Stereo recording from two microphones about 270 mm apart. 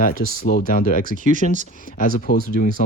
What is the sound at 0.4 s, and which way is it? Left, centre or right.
Speech, left.